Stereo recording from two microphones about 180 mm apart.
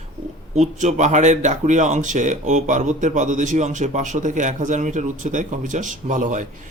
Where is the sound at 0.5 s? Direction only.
40° right (ahead or behind).